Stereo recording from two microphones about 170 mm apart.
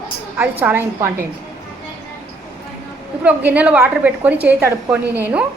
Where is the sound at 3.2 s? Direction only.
10° right (ahead or behind).